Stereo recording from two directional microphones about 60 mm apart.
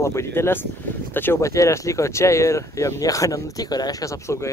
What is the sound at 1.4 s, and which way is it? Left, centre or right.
Speech, left.